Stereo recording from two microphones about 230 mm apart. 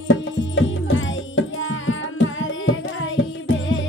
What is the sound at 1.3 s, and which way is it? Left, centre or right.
Music, left.